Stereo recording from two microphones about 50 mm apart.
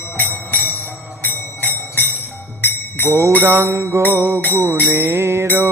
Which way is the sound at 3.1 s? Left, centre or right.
Right.